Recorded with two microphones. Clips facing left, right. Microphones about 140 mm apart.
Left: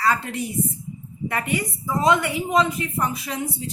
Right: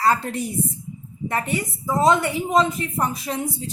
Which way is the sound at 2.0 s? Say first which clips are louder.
Right 1 dB; 35° right (ahead or behind).